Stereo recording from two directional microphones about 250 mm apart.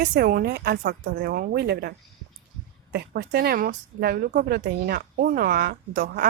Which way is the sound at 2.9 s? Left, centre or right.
Right.